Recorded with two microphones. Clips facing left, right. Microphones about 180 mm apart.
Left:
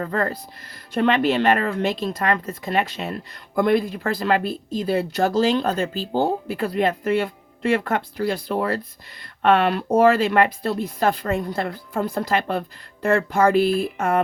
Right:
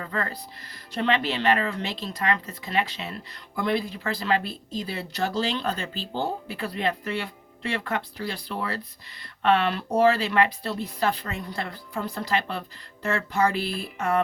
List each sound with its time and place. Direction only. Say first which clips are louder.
0.0 s speech: left 7 dB; 45° left (ahead or behind)